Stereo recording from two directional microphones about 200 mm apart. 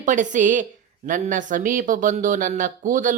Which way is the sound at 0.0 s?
40° right (ahead or behind).